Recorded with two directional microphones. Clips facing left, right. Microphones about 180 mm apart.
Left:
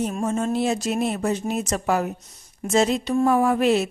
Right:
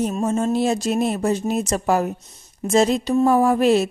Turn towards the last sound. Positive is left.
turn(degrees=-35)  # may be behind; listen again after turning